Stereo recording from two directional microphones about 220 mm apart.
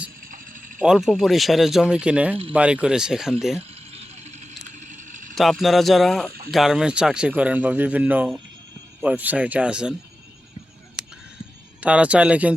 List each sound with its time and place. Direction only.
0.3 s a sound: 35° right (ahead or behind)
0.8 s speech: centre (ahead or behind)
3.7 s vehicle: 30° right (ahead or behind)
5.3 s a man's voice: centre (ahead or behind)
11.8 s speech: 5° right (ahead or behind)